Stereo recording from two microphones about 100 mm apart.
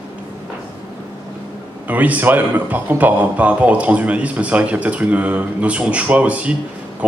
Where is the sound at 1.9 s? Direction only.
15° right (ahead or behind).